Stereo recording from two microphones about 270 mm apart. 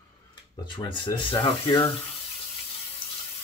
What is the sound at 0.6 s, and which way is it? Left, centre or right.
Speech, centre.